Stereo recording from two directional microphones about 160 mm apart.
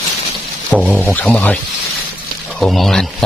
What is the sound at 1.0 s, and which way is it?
Speech, 10° left (ahead or behind).